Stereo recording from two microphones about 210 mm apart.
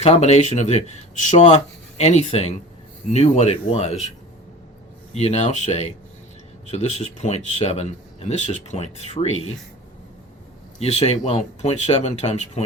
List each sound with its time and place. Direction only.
0.0 s speech: 30° left (ahead or behind)
5.1 s speech: 30° left (ahead or behind)
10.8 s speech: 30° left (ahead or behind)